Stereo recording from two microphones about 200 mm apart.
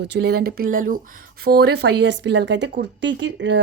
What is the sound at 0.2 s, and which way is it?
Speech, 50° right (ahead or behind).